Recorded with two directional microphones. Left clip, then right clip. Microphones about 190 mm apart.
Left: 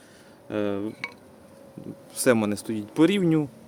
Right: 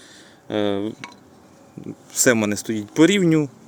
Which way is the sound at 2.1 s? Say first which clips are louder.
Right 4 dB; 15° right (ahead or behind).